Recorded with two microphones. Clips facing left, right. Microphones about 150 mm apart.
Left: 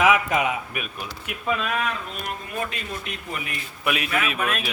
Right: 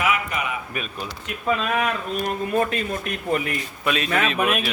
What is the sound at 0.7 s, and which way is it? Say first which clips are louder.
Speech: right 2 dB; 10° left (ahead or behind).